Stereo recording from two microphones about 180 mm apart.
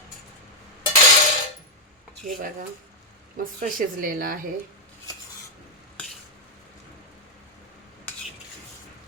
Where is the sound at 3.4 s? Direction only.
50° right (ahead or behind).